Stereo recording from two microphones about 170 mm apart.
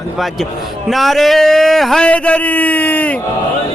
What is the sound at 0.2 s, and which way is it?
A man's voice, centre (ahead or behind).